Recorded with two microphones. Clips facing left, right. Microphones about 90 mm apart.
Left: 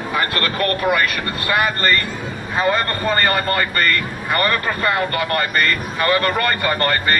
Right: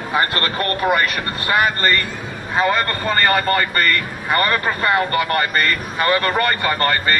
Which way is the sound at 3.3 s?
35° right (ahead or behind).